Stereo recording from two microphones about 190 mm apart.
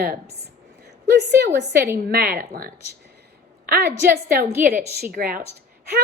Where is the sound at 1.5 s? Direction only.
60° right (ahead or behind).